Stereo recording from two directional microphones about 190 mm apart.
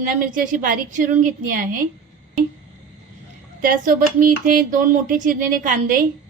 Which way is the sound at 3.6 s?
45° right (ahead or behind).